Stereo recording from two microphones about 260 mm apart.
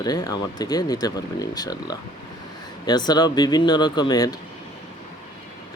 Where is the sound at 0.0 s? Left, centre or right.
Centre.